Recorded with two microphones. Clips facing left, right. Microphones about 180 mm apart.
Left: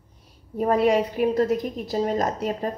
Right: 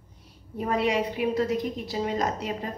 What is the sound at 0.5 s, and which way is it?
A woman's voice, 45° left (ahead or behind).